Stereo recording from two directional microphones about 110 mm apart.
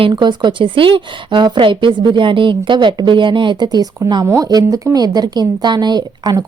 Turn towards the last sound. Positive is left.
turn(degrees=-35)  # may be behind; listen again after turning